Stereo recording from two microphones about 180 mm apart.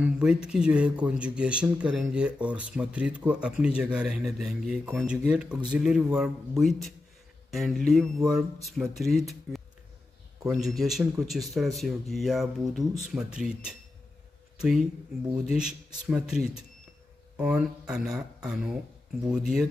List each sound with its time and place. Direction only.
0.0 s speech: 5° right (ahead or behind)